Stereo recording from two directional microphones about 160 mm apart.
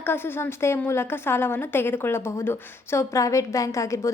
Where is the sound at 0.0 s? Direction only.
15° left (ahead or behind).